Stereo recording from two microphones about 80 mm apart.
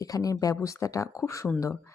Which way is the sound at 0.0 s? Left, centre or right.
Left.